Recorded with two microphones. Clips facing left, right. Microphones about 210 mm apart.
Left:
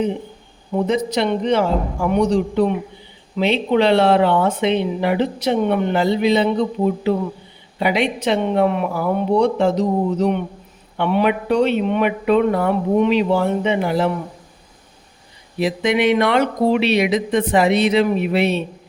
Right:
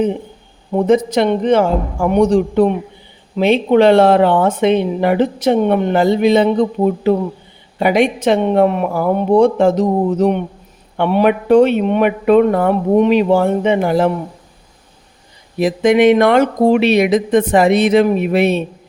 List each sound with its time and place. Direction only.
0.9 s speech: 50° right (ahead or behind)
15.5 s speech: 45° right (ahead or behind)